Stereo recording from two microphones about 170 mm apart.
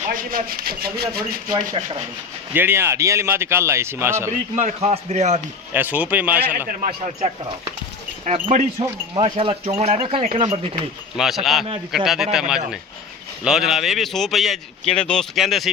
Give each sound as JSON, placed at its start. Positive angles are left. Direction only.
{"t": 0.0, "sound": "speech", "side_deg": -55}
{"t": 1.5, "sound": "speech", "side_deg": -25}
{"t": 2.5, "sound": "a man's voice", "side_deg": -10}
{"t": 4.3, "sound": "a man's voice", "side_deg": -45}
{"t": 5.7, "sound": "a man's voice", "side_deg": -10}
{"t": 6.7, "sound": "a man's voice", "side_deg": -45}
{"t": 11.2, "sound": "a man's voice", "side_deg": 0}